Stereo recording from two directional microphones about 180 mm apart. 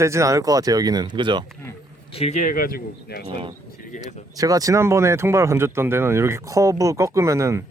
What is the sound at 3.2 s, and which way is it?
Speech, 30° right (ahead or behind).